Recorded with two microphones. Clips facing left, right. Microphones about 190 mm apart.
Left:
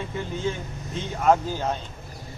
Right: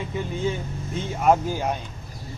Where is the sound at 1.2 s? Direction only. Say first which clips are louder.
Right 1 dB; 10° right (ahead or behind).